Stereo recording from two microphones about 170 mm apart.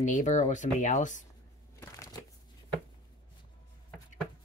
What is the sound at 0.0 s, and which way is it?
Speech, 45° left (ahead or behind).